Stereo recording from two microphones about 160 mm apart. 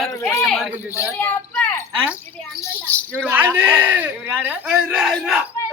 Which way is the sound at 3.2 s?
10° right (ahead or behind).